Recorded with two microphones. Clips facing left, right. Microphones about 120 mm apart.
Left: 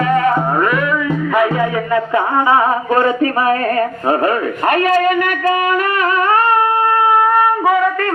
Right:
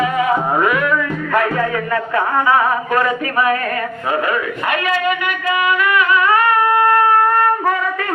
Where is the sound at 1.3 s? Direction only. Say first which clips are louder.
Left 2 dB; 10° left (ahead or behind).